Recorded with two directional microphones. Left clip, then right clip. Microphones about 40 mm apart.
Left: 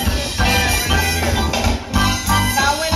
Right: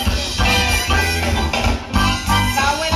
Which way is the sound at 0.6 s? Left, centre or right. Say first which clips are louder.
Even; left.